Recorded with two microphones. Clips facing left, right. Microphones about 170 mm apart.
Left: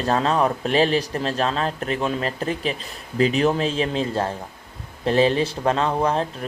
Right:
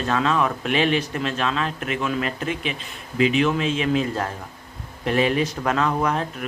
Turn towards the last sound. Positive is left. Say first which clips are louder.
# left 2 dB
turn(degrees=30)  # may be behind; listen again after turning